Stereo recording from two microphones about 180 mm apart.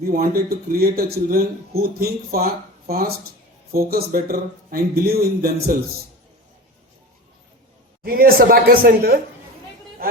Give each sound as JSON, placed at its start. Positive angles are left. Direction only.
{"t": 0.0, "sound": "speech", "side_deg": -55}
{"t": 8.0, "sound": "speech", "side_deg": -55}